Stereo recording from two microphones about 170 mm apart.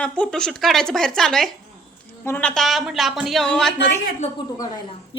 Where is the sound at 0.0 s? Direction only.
5° left (ahead or behind).